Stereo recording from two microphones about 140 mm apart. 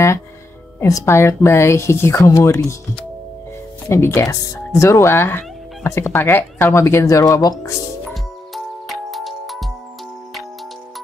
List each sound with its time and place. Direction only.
0.7 s a woman's voice: 20° left (ahead or behind)
3.9 s a woman's voice: 20° left (ahead or behind)
8.1 s music: centre (ahead or behind)